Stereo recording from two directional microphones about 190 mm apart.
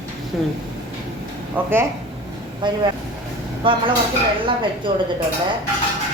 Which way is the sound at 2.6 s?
25° right (ahead or behind).